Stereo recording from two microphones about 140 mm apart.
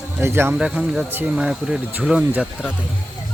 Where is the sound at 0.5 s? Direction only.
5° right (ahead or behind).